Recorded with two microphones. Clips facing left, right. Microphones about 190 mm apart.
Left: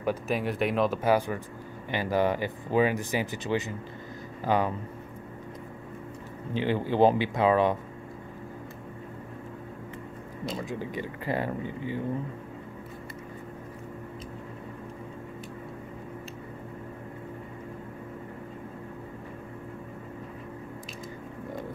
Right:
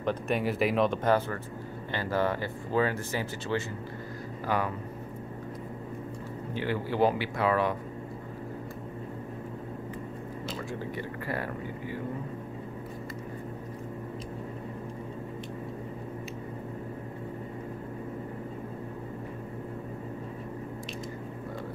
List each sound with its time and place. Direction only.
0.0 s speech: 5° left (ahead or behind); by 4.7 s 20° left (ahead or behind)
6.5 s speech: 20° left (ahead or behind)
10.7 s speech: 20° left (ahead or behind)